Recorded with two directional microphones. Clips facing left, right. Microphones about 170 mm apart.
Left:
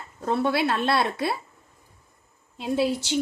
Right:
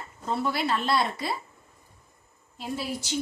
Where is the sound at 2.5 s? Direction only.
70° left (ahead or behind).